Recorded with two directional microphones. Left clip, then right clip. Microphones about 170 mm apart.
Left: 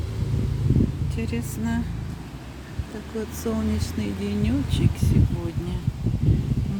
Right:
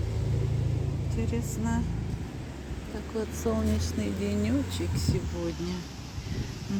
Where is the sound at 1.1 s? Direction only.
15° left (ahead or behind).